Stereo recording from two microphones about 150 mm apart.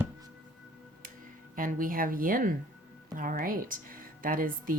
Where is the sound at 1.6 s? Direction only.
65° right (ahead or behind).